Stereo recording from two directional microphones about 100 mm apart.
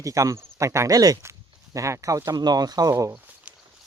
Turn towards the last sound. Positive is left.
turn(degrees=-10)  # may be behind; listen again after turning